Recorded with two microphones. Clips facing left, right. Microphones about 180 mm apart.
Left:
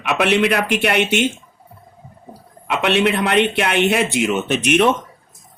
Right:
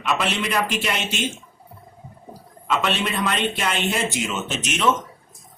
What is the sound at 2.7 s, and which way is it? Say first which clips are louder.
Speech: left 6 dB; 65° left (ahead or behind).